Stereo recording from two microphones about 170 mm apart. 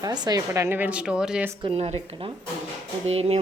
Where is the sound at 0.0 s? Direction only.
20° right (ahead or behind); by 1.5 s 5° right (ahead or behind).